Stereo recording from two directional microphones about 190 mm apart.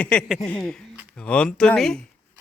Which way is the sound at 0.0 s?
5° left (ahead or behind).